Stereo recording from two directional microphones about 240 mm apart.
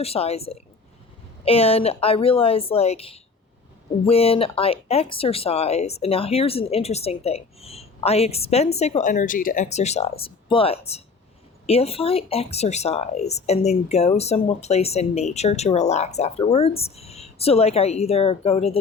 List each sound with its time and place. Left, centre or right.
0.0 s speech: left